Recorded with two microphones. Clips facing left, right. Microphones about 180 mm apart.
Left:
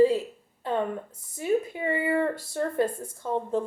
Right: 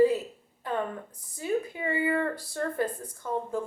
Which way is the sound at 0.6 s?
25° left (ahead or behind).